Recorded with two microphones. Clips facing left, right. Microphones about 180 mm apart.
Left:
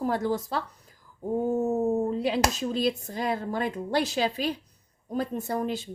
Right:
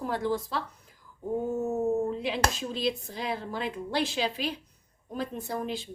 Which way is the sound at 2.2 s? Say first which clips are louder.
Left 4 dB; 40° left (ahead or behind).